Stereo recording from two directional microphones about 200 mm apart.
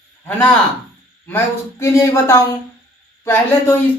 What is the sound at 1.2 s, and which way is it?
Speech, 10° left (ahead or behind).